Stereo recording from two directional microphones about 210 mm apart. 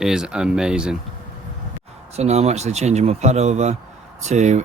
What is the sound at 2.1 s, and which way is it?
Speech, 30° right (ahead or behind).